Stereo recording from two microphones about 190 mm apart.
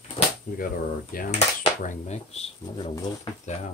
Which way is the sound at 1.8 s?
35° left (ahead or behind).